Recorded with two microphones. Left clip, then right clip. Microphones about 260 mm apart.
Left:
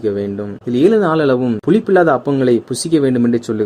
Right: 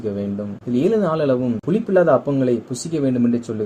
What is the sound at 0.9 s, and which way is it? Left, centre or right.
Speech, left.